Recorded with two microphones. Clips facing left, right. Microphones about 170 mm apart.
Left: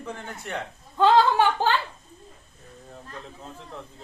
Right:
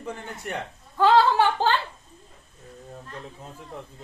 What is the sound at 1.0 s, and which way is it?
Speech, 15° left (ahead or behind).